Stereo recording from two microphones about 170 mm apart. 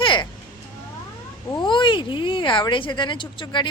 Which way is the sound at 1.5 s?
30° left (ahead or behind).